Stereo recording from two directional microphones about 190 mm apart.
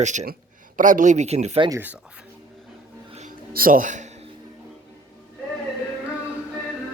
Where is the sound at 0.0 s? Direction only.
40° right (ahead or behind).